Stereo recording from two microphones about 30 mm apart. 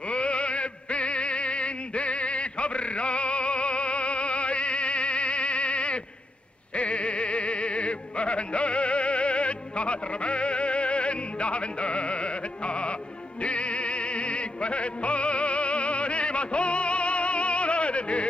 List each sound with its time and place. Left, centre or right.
0.1 s music: left